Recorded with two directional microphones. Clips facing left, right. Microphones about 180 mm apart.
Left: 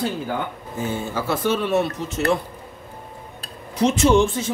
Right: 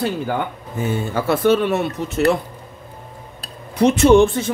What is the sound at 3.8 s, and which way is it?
Speech, 60° right (ahead or behind).